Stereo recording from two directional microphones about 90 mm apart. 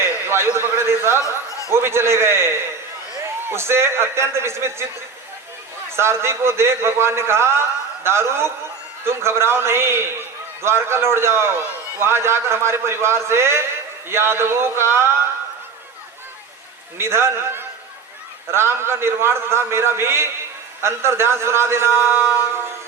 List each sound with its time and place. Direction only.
0.0 s a man's voice: 25° right (ahead or behind)
1.5 s a sound: 35° left (ahead or behind)
1.7 s a man's voice: 30° right (ahead or behind)
6.0 s a man's voice: 30° right (ahead or behind)
17.0 s a man's voice: 30° right (ahead or behind)